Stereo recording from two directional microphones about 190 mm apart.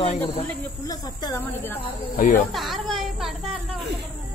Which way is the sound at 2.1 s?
45° left (ahead or behind).